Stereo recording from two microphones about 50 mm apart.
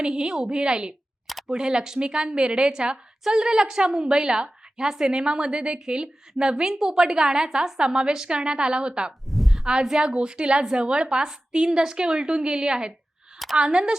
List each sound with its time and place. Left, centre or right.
0.0 s a woman's voice: centre
9.3 s a sound: centre
9.6 s a woman's voice: centre